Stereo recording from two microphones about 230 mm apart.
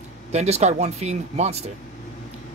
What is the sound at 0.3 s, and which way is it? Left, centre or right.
Speech, right.